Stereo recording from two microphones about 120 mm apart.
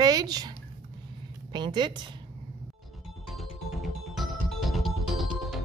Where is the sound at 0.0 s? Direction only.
35° right (ahead or behind).